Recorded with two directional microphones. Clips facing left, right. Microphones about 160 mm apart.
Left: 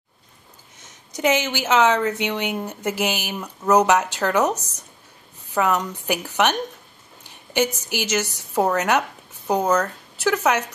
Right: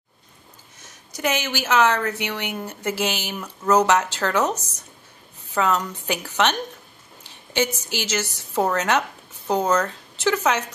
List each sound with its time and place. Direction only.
0.7 s a woman's voice: 20° left (ahead or behind)